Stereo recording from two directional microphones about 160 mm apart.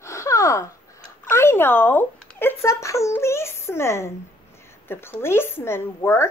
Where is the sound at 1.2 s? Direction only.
15° left (ahead or behind).